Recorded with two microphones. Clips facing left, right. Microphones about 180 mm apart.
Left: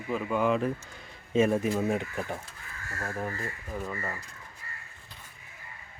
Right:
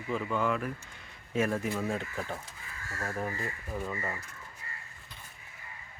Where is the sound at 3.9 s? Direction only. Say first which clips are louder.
Even; 15° right (ahead or behind).